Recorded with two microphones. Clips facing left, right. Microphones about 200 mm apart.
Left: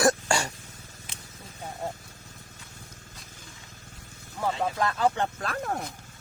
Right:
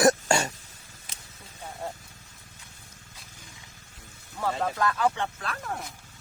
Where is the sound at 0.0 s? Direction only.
20° right (ahead or behind).